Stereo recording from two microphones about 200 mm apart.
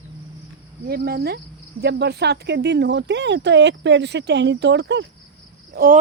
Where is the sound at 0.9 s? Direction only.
50° right (ahead or behind).